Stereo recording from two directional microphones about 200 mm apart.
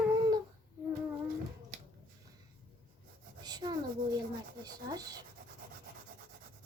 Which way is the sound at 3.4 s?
20° right (ahead or behind).